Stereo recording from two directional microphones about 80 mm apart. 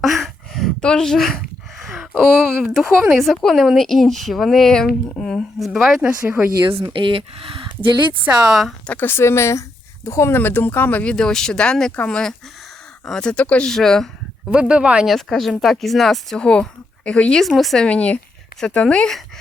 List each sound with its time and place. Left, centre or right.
0.0 s a sound: centre
0.8 s speech: centre
6.0 s speech: centre
6.7 s speech: right
7.6 s a sound: right
8.2 s speech: centre
8.9 s speech: left
11.1 s speech: centre
13.7 s speech: centre
14.5 s speech: centre
15.0 s speech: centre
17.6 s speech: centre
17.8 s speech: centre